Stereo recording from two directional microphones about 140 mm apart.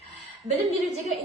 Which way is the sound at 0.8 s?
Centre (ahead or behind).